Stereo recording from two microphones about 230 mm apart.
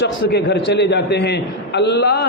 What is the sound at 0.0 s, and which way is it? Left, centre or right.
A man's voice, left.